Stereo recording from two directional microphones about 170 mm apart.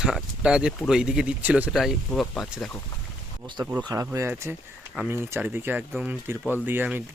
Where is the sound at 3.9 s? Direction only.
20° right (ahead or behind).